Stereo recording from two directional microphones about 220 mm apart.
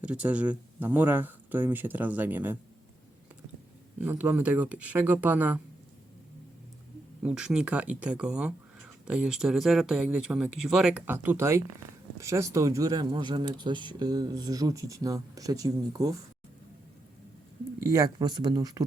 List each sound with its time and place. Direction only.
0.0 s speech: 5° right (ahead or behind)
3.9 s speech: 10° right (ahead or behind)
7.2 s speech: 5° right (ahead or behind)
17.8 s speech: 15° right (ahead or behind)